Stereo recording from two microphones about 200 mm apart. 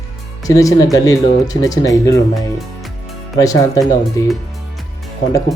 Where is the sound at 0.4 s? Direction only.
15° left (ahead or behind).